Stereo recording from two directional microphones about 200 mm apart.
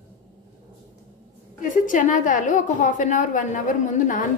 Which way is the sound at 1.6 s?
40° left (ahead or behind).